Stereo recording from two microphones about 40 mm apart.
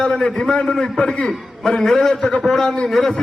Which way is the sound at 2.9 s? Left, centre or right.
Centre.